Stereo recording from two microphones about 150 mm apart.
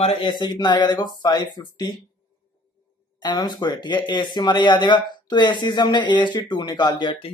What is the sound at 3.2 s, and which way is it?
Speech, 30° left (ahead or behind).